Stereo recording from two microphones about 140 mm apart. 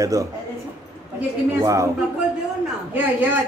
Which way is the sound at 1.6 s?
20° right (ahead or behind).